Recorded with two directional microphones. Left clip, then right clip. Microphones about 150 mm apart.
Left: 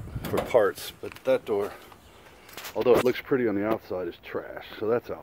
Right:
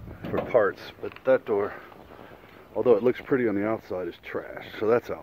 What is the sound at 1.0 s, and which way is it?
Speech, 15° left (ahead or behind).